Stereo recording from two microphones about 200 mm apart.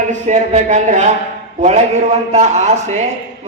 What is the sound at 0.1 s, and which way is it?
A man's voice, 35° right (ahead or behind).